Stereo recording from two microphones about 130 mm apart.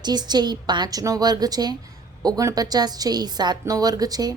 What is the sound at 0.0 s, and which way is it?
A woman's voice, 35° right (ahead or behind).